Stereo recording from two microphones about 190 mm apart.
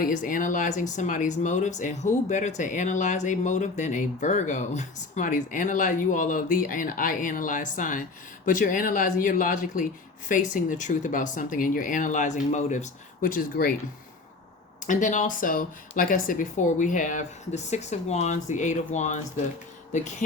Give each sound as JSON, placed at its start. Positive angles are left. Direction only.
{"t": 0.0, "sound": "speech", "side_deg": 45}
{"t": 14.8, "sound": "speech", "side_deg": 40}